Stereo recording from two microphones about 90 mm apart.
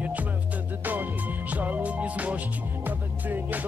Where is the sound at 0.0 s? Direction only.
15° right (ahead or behind).